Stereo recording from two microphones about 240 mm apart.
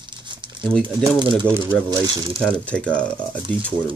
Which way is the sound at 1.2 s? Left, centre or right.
Centre.